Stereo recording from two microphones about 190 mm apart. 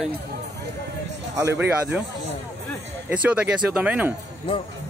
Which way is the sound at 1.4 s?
10° right (ahead or behind).